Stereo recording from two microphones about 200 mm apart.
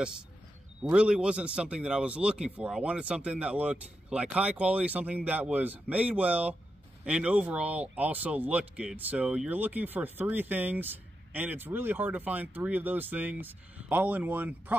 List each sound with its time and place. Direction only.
0.8 s a man's voice: 5° right (ahead or behind)